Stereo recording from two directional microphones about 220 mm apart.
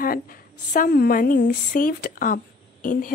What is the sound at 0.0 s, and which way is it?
A woman's voice, 40° left (ahead or behind).